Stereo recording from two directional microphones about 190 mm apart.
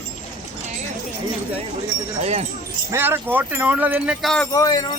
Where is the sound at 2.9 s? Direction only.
10° right (ahead or behind).